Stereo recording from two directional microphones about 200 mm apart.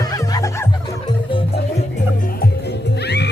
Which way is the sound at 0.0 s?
20° left (ahead or behind).